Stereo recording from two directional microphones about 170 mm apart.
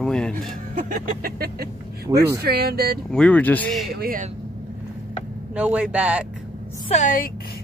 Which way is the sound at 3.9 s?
55° right (ahead or behind).